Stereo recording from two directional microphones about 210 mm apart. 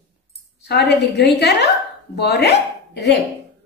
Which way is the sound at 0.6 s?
50° left (ahead or behind).